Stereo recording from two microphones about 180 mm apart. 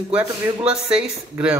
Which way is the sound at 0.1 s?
5° right (ahead or behind).